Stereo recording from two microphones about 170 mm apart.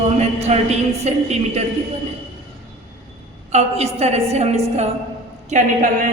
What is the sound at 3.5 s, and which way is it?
A woman's voice, 40° right (ahead or behind).